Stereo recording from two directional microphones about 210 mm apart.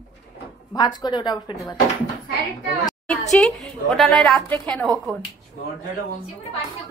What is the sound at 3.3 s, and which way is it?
A woman's voice, centre (ahead or behind).